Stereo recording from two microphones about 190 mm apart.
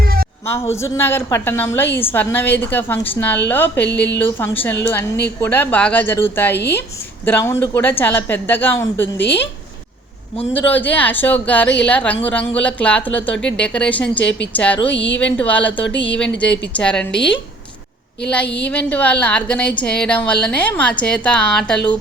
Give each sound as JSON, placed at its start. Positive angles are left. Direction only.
{"t": 0.0, "sound": "a sound", "side_deg": -50}
{"t": 0.4, "sound": "a woman's voice", "side_deg": 15}
{"t": 10.5, "sound": "a woman's voice", "side_deg": 10}
{"t": 18.7, "sound": "a woman's voice", "side_deg": 10}